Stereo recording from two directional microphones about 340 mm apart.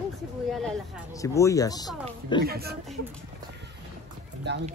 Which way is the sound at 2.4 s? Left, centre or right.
Right.